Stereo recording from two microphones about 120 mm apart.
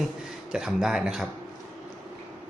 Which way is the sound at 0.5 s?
5° right (ahead or behind).